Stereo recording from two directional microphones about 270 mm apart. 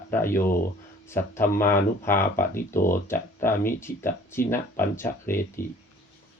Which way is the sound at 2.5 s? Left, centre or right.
Left.